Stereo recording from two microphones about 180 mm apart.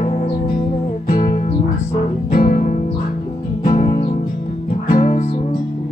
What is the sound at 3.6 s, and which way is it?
Music, 35° left (ahead or behind).